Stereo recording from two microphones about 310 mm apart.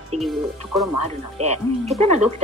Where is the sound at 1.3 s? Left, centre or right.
Right.